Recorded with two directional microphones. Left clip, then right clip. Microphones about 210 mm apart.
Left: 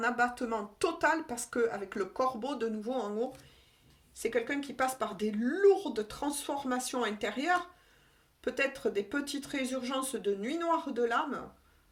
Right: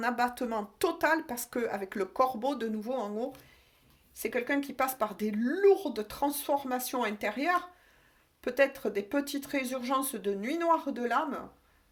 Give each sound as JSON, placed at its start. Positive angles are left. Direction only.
{"t": 0.0, "sound": "speech", "side_deg": -40}